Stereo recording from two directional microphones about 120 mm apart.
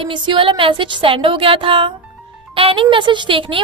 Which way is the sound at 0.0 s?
45° right (ahead or behind).